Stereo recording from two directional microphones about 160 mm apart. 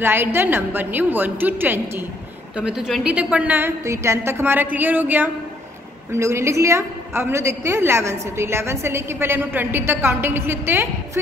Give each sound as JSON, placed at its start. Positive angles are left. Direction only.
{"t": 0.0, "sound": "a woman's voice", "side_deg": -15}